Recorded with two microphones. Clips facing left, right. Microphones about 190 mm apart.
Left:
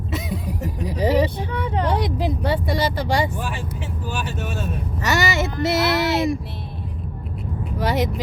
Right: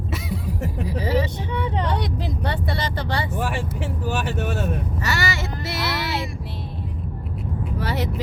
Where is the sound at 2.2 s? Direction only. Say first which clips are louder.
Left 4 dB; 10° left (ahead or behind).